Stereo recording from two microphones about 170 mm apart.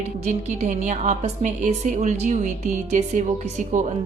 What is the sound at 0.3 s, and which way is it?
A woman's voice, 45° right (ahead or behind).